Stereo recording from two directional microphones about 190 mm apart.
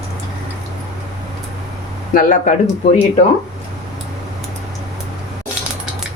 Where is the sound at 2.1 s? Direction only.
45° left (ahead or behind).